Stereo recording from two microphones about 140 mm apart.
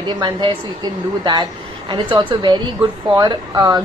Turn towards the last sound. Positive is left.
turn(degrees=-30)  # may be behind; listen again after turning